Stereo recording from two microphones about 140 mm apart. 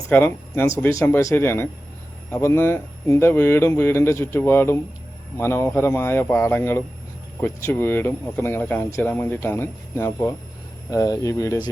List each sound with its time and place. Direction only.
0.1 s speech: 15° left (ahead or behind)